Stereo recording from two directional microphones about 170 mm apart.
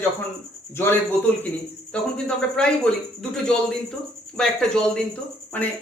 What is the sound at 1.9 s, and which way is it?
Speech, 5° left (ahead or behind).